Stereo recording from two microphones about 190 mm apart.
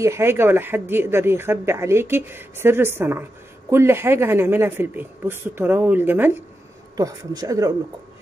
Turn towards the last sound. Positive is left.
turn(degrees=-20)  # may be behind; listen again after turning